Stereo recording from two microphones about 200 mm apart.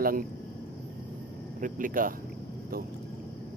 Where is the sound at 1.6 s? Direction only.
40° right (ahead or behind).